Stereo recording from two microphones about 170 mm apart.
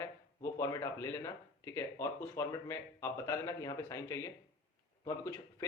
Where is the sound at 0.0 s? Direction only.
15° left (ahead or behind).